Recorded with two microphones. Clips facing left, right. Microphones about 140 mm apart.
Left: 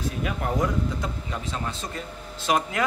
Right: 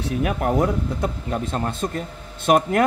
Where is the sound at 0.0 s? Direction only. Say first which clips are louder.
Right 6 dB; 60° right (ahead or behind).